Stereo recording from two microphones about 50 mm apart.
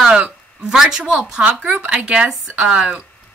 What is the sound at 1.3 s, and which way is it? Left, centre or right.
Speech, right.